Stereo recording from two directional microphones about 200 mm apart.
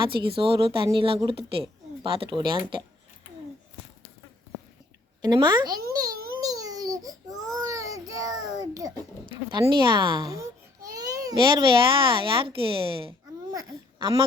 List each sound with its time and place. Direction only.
0.0 s speech: 25° right (ahead or behind)
5.2 s speech: 20° right (ahead or behind)
5.9 s a sound: 20° right (ahead or behind)
6.4 s baby cry: 20° right (ahead or behind)
7.5 s child singing: 15° right (ahead or behind)
9.5 s a child's voice: 25° right (ahead or behind)